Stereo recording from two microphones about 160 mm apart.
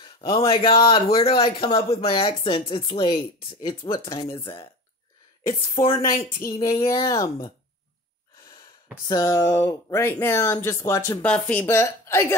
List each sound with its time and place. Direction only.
0.0 s a sound: 35° left (ahead or behind)
0.5 s speech: 35° left (ahead or behind)
5.9 s speech: 20° left (ahead or behind)
9.0 s speech: 20° left (ahead or behind)
11.2 s a woman's voice: 5° left (ahead or behind)